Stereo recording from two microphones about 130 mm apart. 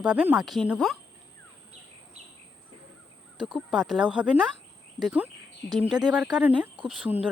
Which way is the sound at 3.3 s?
35° right (ahead or behind).